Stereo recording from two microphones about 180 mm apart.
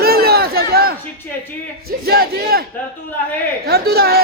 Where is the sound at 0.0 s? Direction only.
60° right (ahead or behind).